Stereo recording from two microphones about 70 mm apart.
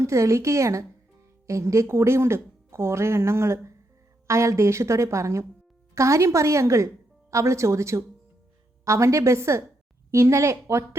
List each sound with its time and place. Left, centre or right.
0.0 s a woman's voice: right